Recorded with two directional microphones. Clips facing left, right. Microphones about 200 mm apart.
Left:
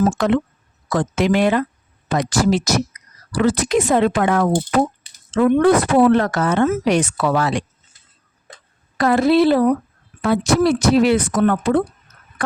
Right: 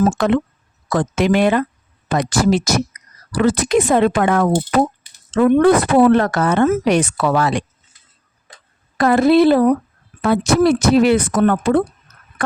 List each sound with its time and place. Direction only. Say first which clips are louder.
0.1 s speech: right 1 dB; 60° right (ahead or behind)
9.0 s speech: right 2 dB; 50° right (ahead or behind)